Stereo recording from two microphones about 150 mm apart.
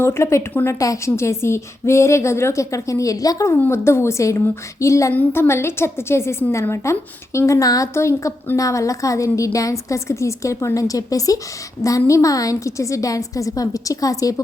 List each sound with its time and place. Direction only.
0.0 s a woman's voice: 15° left (ahead or behind)